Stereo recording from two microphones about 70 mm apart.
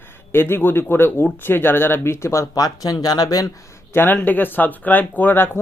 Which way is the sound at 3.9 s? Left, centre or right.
Left.